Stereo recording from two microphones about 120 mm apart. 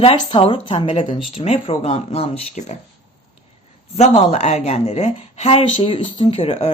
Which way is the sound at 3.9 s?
65° left (ahead or behind).